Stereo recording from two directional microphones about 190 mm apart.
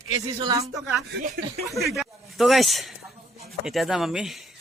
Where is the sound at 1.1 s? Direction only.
55° right (ahead or behind).